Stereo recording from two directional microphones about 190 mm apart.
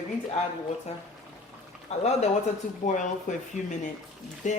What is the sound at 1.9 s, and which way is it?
Speech, 35° left (ahead or behind).